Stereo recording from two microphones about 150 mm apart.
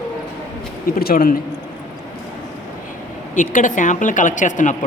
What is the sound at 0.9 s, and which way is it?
Speech, 80° left.